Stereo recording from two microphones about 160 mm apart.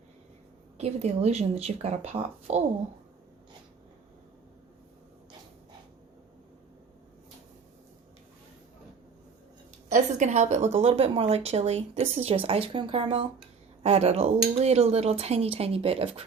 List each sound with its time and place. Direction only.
0.8 s a woman's voice: 40° right (ahead or behind)
9.9 s a woman's voice: 45° right (ahead or behind)